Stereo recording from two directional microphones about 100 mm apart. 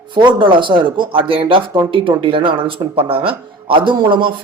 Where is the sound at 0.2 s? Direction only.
50° right (ahead or behind).